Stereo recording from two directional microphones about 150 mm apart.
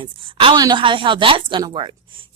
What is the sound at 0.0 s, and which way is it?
Speech, 30° right (ahead or behind).